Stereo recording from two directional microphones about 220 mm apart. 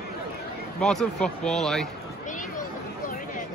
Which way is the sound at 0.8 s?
5° left (ahead or behind).